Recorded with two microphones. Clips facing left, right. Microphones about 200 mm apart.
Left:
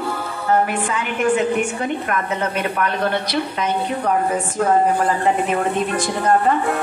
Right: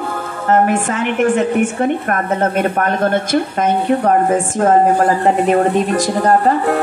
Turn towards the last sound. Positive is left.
turn(degrees=-40)  # may be behind; listen again after turning